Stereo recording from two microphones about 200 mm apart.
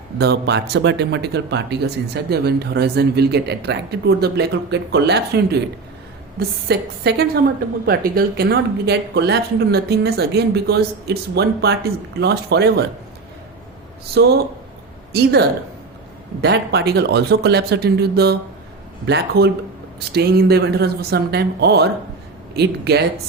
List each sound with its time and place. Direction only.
0.2 s speech: 55° right (ahead or behind)
6.7 s speech: 55° right (ahead or behind)
14.1 s speech: 55° right (ahead or behind)